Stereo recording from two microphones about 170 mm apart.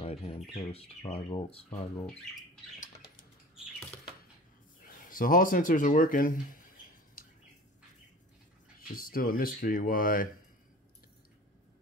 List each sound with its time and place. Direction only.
0.0 s speech: 35° left (ahead or behind)
4.8 s speech: 55° left (ahead or behind)
8.8 s speech: 60° left (ahead or behind)